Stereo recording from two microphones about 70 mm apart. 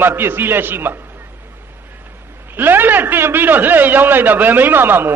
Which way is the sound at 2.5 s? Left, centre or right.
Right.